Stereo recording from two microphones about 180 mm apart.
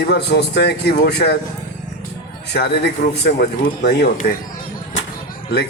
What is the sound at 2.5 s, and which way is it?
Speech, 70° left (ahead or behind).